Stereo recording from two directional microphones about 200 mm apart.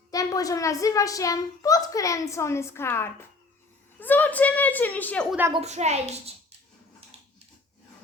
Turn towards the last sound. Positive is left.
turn(degrees=-30)  # may be behind; listen again after turning